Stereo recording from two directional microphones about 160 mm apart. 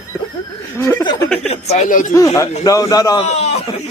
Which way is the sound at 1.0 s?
25° left (ahead or behind).